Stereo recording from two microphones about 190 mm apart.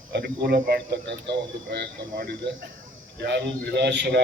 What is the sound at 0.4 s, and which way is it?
A man's voice, 60° right (ahead or behind).